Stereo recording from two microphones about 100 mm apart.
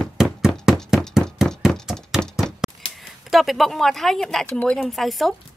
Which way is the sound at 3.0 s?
Centre (ahead or behind).